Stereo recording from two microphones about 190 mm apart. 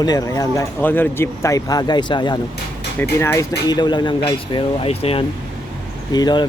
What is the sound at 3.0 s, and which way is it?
Speech, 15° left (ahead or behind).